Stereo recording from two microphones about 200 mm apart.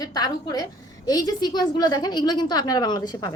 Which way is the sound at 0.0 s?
20° left (ahead or behind).